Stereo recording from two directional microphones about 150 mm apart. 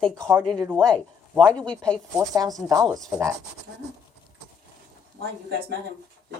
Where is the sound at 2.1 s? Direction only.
25° right (ahead or behind).